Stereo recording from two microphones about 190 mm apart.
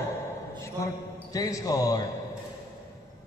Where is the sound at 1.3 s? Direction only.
20° left (ahead or behind).